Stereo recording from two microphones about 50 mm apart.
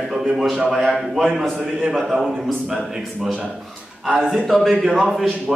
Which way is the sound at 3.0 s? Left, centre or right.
Centre.